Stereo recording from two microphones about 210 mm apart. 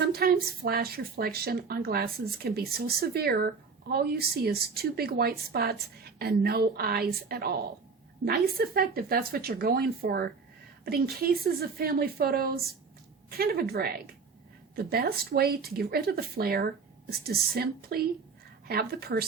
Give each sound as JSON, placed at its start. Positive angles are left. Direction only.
{"t": 0.0, "sound": "a woman's voice", "side_deg": -45}